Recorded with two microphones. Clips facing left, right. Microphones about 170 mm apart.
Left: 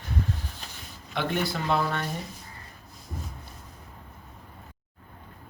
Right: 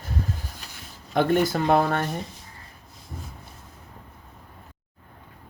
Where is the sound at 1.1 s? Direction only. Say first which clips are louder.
Right 8 dB; 45° right (ahead or behind).